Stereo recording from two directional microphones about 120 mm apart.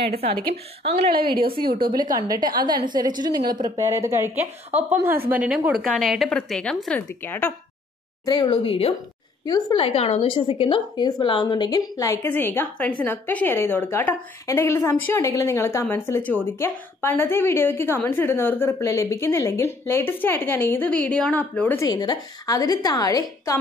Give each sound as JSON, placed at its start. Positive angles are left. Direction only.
{"t": 1.0, "sound": "a woman's voice", "side_deg": -45}
{"t": 1.9, "sound": "a woman's voice", "side_deg": -35}
{"t": 4.6, "sound": "a woman's voice", "side_deg": -80}
{"t": 5.0, "sound": "a woman's voice", "side_deg": -15}
{"t": 5.7, "sound": "a woman's voice", "side_deg": 0}
{"t": 8.3, "sound": "a woman's voice", "side_deg": 40}
{"t": 9.5, "sound": "a woman's voice", "side_deg": 35}
{"t": 9.8, "sound": "a woman's voice", "side_deg": 55}
{"t": 11.5, "sound": "a woman's voice", "side_deg": 35}
{"t": 12.3, "sound": "a woman's voice", "side_deg": 15}
{"t": 21.8, "sound": "a woman's voice", "side_deg": 35}